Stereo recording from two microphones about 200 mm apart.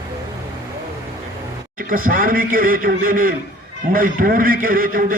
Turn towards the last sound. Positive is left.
turn(degrees=-45)  # may be behind; listen again after turning